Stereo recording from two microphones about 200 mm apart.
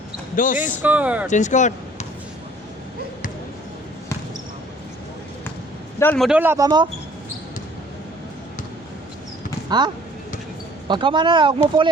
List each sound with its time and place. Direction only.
0.3 s speech: 40° left (ahead or behind)
0.6 s speech: 10° right (ahead or behind)
1.3 s speech: 40° left (ahead or behind)
6.0 s a man's voice: 10° left (ahead or behind)
6.2 s speech: 10° right (ahead or behind)
9.6 s speech: 20° right (ahead or behind)